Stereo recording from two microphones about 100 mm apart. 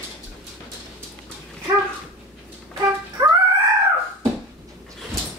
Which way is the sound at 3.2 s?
40° right (ahead or behind).